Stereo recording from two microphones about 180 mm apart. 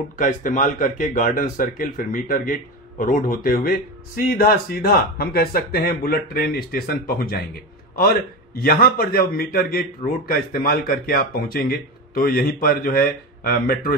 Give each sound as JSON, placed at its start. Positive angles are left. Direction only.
{"t": 0.2, "sound": "speech", "side_deg": 45}